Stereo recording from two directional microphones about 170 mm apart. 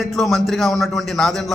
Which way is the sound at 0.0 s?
Centre (ahead or behind).